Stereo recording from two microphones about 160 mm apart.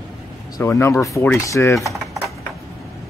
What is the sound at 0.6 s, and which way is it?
Speech, 15° left (ahead or behind).